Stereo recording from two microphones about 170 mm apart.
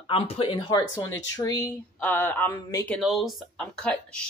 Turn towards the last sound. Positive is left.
turn(degrees=5)  # may be behind; listen again after turning